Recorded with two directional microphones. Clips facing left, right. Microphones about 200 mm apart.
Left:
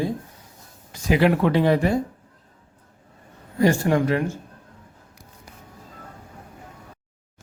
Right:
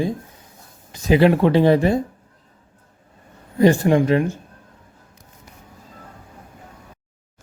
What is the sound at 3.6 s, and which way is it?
Speech, 20° right (ahead or behind).